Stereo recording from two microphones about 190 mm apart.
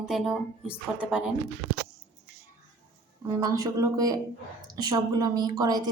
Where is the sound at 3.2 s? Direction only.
15° right (ahead or behind).